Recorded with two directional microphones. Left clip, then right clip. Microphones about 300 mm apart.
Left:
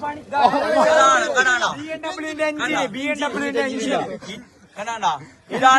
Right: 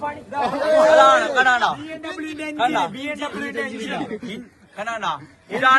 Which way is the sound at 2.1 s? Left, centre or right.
Left.